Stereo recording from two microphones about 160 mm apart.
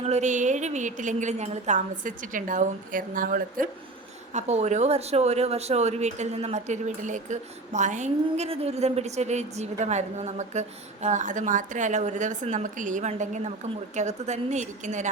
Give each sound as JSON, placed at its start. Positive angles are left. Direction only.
{"t": 0.0, "sound": "speech", "side_deg": -45}
{"t": 4.4, "sound": "speech", "side_deg": -45}